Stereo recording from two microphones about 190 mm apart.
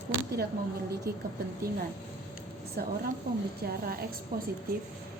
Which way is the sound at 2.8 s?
55° right (ahead or behind).